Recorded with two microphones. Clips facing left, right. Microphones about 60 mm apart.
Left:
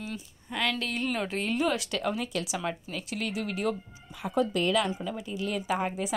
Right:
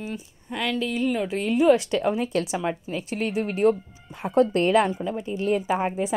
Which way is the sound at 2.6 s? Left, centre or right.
Right.